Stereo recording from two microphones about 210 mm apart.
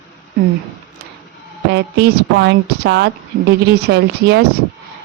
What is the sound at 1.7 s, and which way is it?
Speech, 55° right (ahead or behind).